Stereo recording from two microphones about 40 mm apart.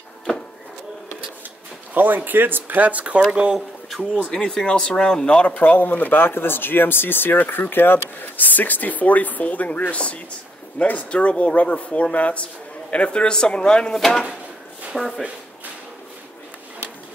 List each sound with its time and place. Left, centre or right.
2.0 s speech: right
3.3 s speech: right
4.6 s speech: left
5.5 s speech: left
13.9 s speech: centre